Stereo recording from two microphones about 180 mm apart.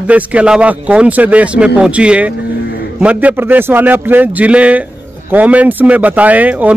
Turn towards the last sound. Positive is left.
turn(degrees=-10)  # may be behind; listen again after turning